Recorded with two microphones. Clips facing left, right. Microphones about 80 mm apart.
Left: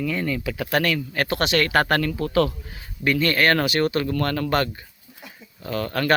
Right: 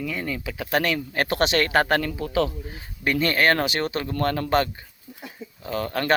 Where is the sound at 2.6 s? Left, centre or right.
Right.